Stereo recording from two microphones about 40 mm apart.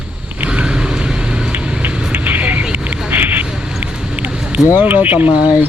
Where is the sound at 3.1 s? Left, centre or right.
Right.